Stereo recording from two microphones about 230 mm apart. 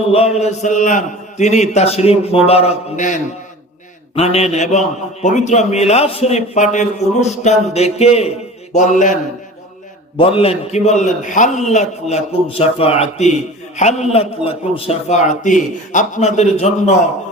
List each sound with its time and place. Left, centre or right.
0.1 s a man's voice: left
8.7 s mantra: left
10.2 s a man's voice: left